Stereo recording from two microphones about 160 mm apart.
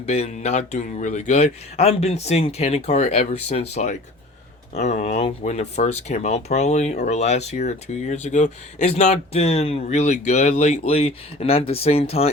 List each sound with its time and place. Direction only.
0.0 s speech: 40° left (ahead or behind)